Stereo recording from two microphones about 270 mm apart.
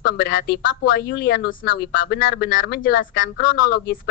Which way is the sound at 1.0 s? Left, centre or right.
Left.